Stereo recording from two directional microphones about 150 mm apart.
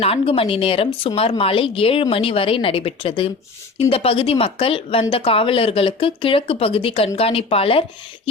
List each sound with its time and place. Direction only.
0.0 s speech: 40° left (ahead or behind)